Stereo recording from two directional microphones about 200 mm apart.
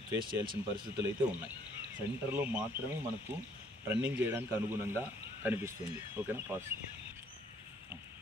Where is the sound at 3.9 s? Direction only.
10° right (ahead or behind).